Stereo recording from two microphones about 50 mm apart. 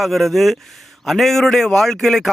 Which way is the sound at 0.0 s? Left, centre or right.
Centre.